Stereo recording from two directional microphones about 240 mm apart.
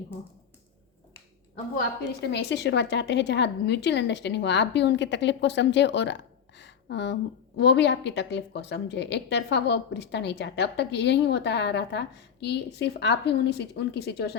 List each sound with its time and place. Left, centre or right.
2.2 s a woman's voice: left